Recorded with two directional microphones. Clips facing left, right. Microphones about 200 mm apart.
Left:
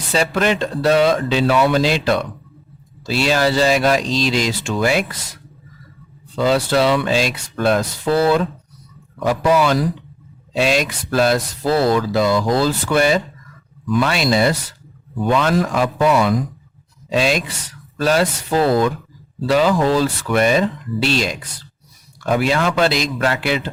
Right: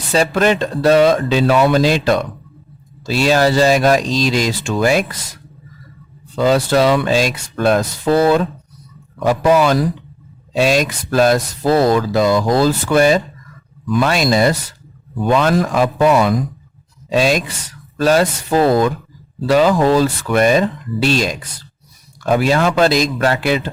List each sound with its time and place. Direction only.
0.1 s speech: 40° right (ahead or behind)
6.4 s a man's voice: 45° right (ahead or behind)
22.3 s a man's voice: 40° right (ahead or behind)